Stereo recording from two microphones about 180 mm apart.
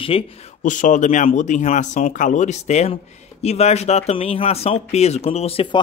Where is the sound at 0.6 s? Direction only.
45° left (ahead or behind).